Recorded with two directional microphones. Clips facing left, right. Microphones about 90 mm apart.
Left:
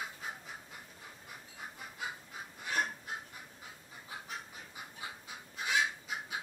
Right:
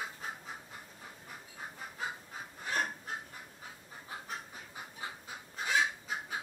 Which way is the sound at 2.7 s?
40° right (ahead or behind).